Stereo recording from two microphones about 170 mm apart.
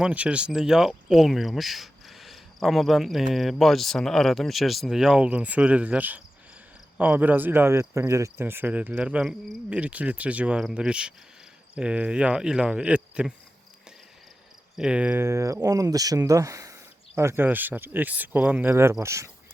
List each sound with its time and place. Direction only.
0.0 s speech: 5° right (ahead or behind)
14.8 s speech: 5° right (ahead or behind)